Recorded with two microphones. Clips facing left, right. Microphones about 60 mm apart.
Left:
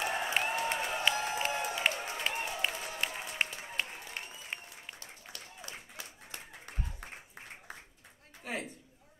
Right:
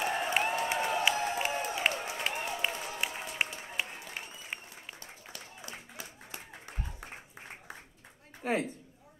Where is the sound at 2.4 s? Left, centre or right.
Centre.